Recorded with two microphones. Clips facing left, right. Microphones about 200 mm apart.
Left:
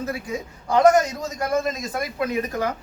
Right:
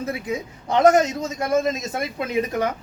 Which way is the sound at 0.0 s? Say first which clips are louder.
Right 2 dB; 20° right (ahead or behind).